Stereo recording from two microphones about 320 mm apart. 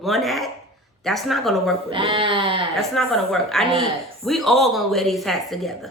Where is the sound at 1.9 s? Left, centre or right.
Centre.